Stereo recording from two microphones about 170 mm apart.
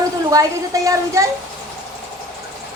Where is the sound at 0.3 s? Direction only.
20° right (ahead or behind).